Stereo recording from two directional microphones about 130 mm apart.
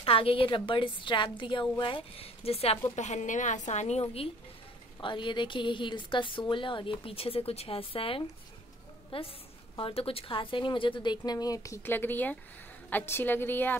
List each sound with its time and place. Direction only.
0.0 s a woman's voice: 45° left (ahead or behind)
3.0 s a woman's voice: 65° left (ahead or behind); by 4.3 s 50° left (ahead or behind)
5.0 s a woman's voice: 40° left (ahead or behind); by 13.7 s 15° left (ahead or behind)